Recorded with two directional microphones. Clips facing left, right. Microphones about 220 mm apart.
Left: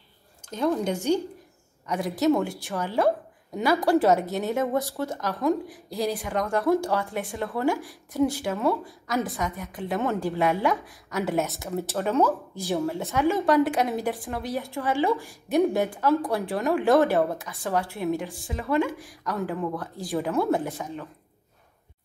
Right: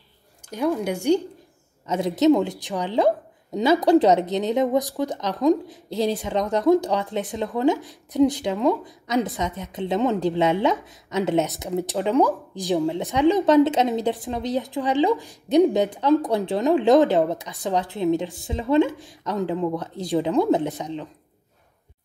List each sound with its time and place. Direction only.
0.5 s speech: 15° right (ahead or behind)
1.9 s speech: 25° right (ahead or behind)